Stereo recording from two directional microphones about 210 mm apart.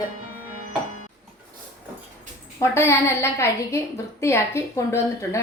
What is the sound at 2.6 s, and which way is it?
A woman's voice, 10° left (ahead or behind).